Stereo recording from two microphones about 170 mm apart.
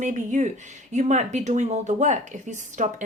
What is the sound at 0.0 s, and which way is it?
Speech, 45° right (ahead or behind).